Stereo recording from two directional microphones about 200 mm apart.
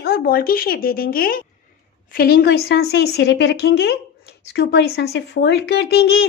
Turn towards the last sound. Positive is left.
turn(degrees=55)  # may be behind; listen again after turning